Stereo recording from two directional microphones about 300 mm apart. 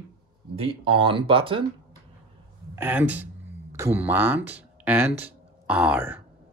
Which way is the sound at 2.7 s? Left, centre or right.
Centre.